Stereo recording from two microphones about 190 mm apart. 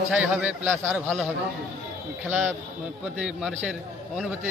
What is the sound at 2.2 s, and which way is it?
A man's voice, 5° right (ahead or behind).